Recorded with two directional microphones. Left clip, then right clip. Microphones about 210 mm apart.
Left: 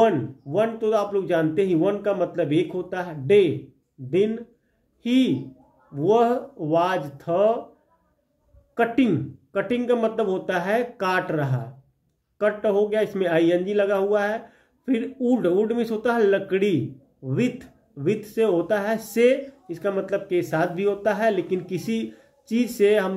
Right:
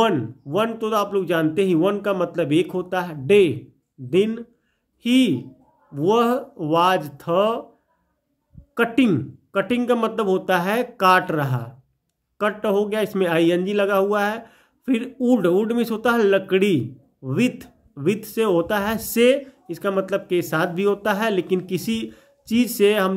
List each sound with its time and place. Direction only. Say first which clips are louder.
0.0 s a man's voice: even; 50° right (ahead or behind)
5.9 s a man's voice: right 1 dB; 50° right (ahead or behind)
8.7 s a man's voice: right 2 dB; 50° right (ahead or behind)